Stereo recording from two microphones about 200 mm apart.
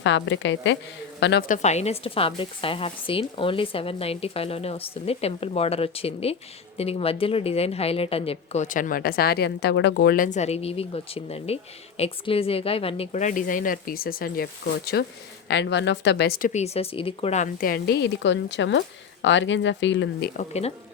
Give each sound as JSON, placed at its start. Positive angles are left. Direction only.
{"t": 0.0, "sound": "speech", "side_deg": 65}
{"t": 1.5, "sound": "speech", "side_deg": 35}